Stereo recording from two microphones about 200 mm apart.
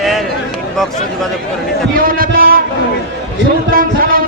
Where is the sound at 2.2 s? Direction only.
45° right (ahead or behind).